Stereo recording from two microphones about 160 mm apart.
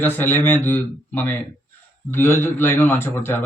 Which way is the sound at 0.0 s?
10° left (ahead or behind).